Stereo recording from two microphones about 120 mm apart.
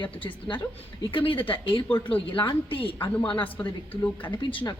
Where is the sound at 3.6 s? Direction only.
15° left (ahead or behind).